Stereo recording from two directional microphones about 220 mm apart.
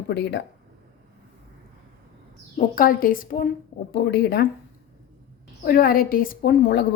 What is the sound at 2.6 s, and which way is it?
A woman's voice, 40° left (ahead or behind).